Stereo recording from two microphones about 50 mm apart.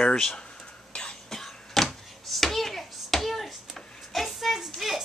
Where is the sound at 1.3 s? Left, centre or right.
Centre.